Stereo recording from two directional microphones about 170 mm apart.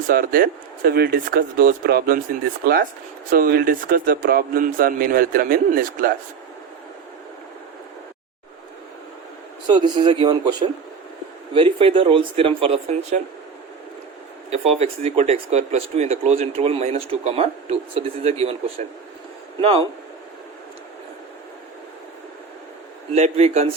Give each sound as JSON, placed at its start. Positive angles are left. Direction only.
{"t": 0.1, "sound": "a man's voice", "side_deg": -60}
{"t": 3.2, "sound": "a man's voice", "side_deg": -60}
{"t": 9.6, "sound": "speech", "side_deg": -25}
{"t": 14.5, "sound": "speech", "side_deg": -40}
{"t": 23.1, "sound": "speech", "side_deg": -40}